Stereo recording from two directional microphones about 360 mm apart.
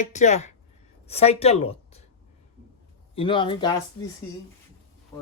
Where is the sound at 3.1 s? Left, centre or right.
Centre.